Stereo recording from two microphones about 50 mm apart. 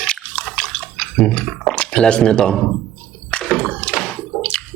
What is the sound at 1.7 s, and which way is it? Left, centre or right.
Speech, centre.